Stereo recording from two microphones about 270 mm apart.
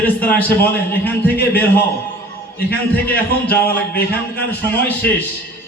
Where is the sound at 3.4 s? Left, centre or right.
Centre.